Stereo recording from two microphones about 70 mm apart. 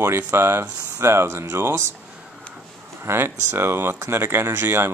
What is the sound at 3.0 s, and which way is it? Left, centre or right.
Speech, right.